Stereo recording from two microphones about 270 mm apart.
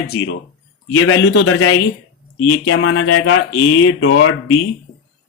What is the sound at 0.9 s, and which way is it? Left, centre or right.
A man's voice, left.